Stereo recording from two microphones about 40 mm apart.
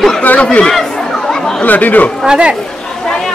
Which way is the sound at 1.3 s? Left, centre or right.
Centre.